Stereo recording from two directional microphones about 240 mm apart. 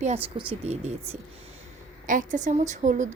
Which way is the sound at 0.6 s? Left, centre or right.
Right.